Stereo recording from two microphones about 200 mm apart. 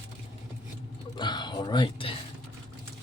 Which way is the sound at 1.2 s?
20° left (ahead or behind).